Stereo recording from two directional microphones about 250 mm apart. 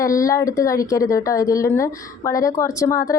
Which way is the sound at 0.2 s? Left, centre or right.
Centre.